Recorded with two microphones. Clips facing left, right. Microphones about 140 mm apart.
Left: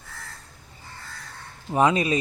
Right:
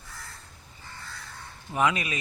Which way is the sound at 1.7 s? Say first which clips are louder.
Left 6 dB; 35° left (ahead or behind).